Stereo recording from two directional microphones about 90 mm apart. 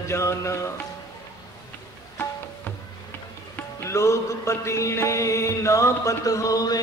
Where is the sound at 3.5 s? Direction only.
30° left (ahead or behind).